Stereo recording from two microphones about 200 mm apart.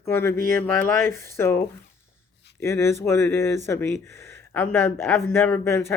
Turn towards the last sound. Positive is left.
turn(degrees=10)  # may be behind; listen again after turning